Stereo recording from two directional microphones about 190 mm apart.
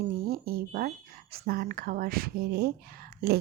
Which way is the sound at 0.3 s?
50° right (ahead or behind).